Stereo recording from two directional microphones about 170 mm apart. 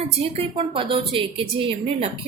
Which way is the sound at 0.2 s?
35° right (ahead or behind).